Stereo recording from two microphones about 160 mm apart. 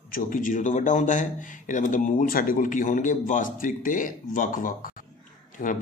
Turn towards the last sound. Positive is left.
turn(degrees=55)  # may be behind; listen again after turning